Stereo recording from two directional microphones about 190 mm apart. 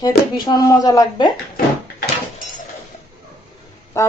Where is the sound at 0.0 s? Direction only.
20° left (ahead or behind).